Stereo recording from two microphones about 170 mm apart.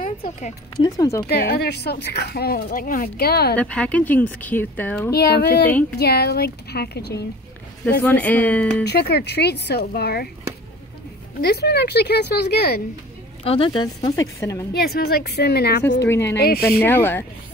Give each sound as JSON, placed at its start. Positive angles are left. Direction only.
{"t": 0.0, "sound": "speech", "side_deg": 55}
{"t": 0.8, "sound": "a woman's voice", "side_deg": 20}
{"t": 1.3, "sound": "speech", "side_deg": 70}
{"t": 3.5, "sound": "speech", "side_deg": 5}
{"t": 5.1, "sound": "speech", "side_deg": 70}
{"t": 8.0, "sound": "speech", "side_deg": 10}
{"t": 8.8, "sound": "speech", "side_deg": 75}
{"t": 11.4, "sound": "speech", "side_deg": 70}
{"t": 13.4, "sound": "a woman's voice", "side_deg": 35}
{"t": 14.7, "sound": "speech", "side_deg": 65}
{"t": 16.1, "sound": "speech", "side_deg": 15}
{"t": 16.3, "sound": "speech", "side_deg": 65}
{"t": 16.8, "sound": "speech", "side_deg": 10}